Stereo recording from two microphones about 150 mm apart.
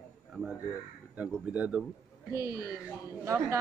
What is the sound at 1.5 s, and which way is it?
Speech, 10° right (ahead or behind).